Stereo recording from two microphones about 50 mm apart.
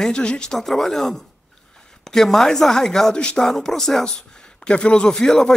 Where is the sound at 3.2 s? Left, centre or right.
Left.